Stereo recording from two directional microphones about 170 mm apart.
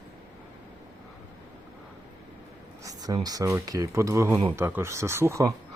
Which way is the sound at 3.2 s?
20° right (ahead or behind).